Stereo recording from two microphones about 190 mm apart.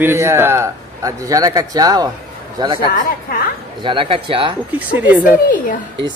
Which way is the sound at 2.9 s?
50° left (ahead or behind).